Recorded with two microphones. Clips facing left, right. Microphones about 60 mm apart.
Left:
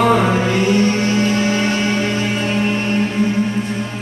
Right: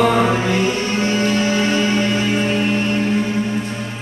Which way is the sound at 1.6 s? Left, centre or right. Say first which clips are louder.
Right 1 dB; centre.